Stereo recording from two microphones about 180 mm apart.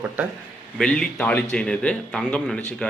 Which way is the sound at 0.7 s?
5° left (ahead or behind).